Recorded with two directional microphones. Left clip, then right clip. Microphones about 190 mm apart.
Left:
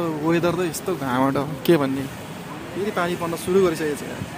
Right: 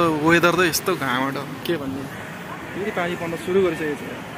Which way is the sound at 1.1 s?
35° left (ahead or behind).